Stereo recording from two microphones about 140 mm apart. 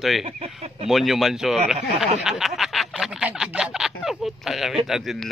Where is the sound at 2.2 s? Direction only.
Centre (ahead or behind).